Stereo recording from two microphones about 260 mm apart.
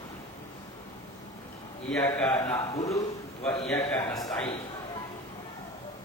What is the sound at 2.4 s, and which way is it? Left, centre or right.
Speech, centre.